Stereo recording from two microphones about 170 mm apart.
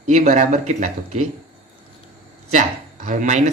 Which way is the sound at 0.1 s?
45° right (ahead or behind).